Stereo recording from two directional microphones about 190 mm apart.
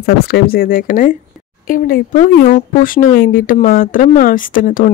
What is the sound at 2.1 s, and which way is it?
Speech, 45° left (ahead or behind).